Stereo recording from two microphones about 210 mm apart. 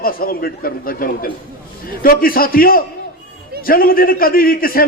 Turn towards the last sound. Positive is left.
turn(degrees=45)  # may be behind; listen again after turning